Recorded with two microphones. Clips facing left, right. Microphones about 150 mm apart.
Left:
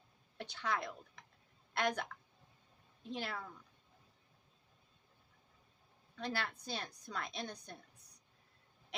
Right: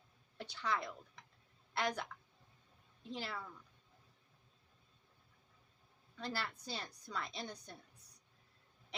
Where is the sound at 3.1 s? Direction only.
60° left (ahead or behind).